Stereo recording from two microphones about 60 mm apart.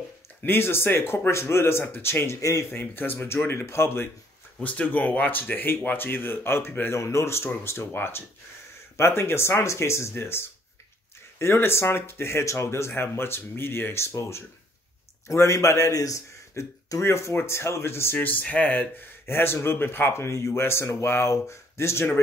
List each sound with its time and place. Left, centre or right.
0.4 s speech: left
4.6 s speech: left
6.9 s a man's voice: left
16.5 s speech: left
18.2 s speech: left
19.2 s speech: left